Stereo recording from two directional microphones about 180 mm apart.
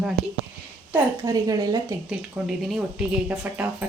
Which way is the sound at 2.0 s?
5° right (ahead or behind).